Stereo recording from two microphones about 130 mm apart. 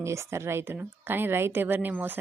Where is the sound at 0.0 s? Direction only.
20° right (ahead or behind).